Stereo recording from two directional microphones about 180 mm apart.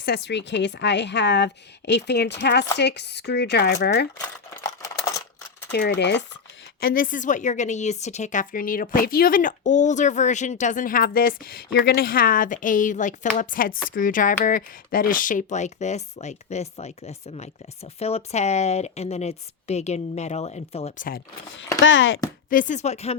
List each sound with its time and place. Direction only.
0.0 s a woman's voice: 65° left (ahead or behind)
4.6 s a sound: 20° left (ahead or behind)
5.7 s a woman's voice: 70° left (ahead or behind)
6.7 s a woman's voice: 55° left (ahead or behind); by 21.1 s 40° left (ahead or behind)
21.8 s speech: 90° left
22.4 s speech: 45° left (ahead or behind)